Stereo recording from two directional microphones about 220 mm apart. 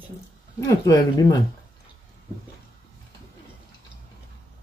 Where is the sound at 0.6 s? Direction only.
15° left (ahead or behind).